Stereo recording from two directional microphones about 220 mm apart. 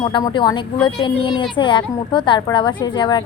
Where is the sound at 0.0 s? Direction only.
20° left (ahead or behind).